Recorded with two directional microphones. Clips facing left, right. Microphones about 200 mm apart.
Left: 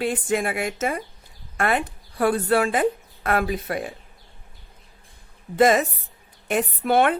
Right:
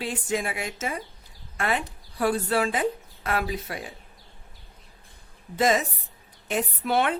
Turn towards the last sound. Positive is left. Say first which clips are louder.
# left 5 dB
turn(degrees=55)  # may be behind; listen again after turning